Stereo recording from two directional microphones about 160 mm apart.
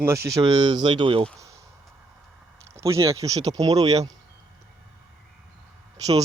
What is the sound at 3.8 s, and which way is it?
Speech, 40° right (ahead or behind).